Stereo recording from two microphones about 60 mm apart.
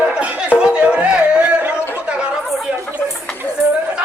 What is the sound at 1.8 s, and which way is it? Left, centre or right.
Chatter, left.